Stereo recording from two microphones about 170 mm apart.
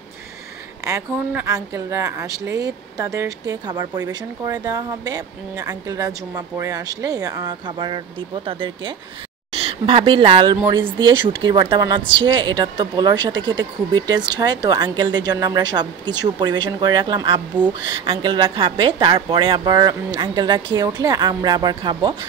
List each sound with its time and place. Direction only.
0.8 s a woman's voice: 15° right (ahead or behind)